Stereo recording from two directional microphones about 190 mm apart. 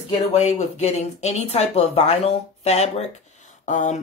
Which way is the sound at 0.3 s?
35° left (ahead or behind).